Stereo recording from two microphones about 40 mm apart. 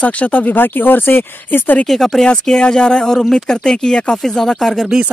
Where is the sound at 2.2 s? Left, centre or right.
Left.